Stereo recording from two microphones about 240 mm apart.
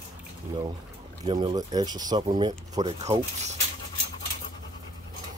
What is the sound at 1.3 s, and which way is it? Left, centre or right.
Speech, right.